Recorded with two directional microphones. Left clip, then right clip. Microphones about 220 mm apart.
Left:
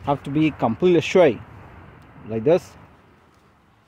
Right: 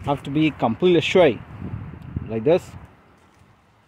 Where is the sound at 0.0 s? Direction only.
5° left (ahead or behind).